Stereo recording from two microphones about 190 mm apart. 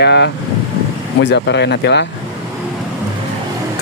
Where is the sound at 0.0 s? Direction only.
65° left (ahead or behind).